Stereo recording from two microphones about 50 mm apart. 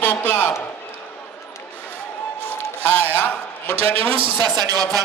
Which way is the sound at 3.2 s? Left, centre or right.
Left.